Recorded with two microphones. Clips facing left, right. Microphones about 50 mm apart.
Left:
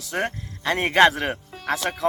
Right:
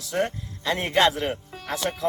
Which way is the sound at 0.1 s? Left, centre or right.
Left.